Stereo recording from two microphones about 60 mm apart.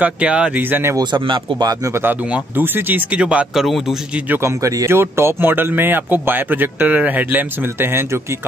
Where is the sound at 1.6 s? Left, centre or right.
Right.